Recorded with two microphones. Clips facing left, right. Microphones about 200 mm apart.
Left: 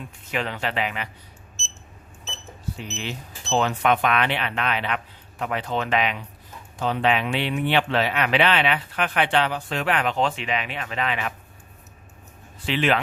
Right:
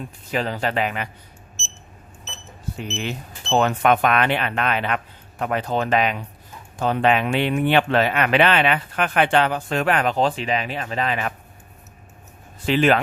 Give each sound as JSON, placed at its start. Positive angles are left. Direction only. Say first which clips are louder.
{"t": 0.3, "sound": "speech", "louder": "right 4 dB", "side_deg": -35}
{"t": 2.7, "sound": "speech", "louder": "right 6 dB", "side_deg": -55}
{"t": 12.6, "sound": "speech", "louder": "right 5 dB", "side_deg": -45}